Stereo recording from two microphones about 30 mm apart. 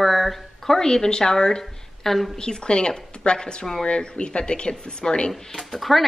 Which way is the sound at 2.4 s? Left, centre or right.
Left.